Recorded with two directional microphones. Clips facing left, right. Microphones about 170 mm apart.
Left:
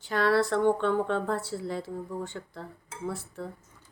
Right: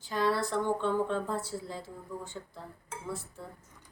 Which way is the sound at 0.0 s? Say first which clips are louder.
Left 5 dB; 70° left (ahead or behind).